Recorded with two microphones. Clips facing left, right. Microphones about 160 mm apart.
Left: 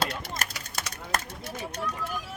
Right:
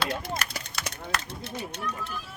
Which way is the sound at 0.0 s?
45° left (ahead or behind).